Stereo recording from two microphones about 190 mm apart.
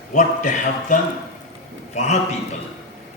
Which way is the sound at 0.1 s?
40° left (ahead or behind).